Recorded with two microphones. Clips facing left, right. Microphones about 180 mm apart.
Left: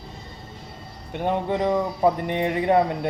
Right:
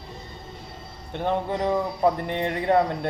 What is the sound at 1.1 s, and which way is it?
Speech, 15° left (ahead or behind).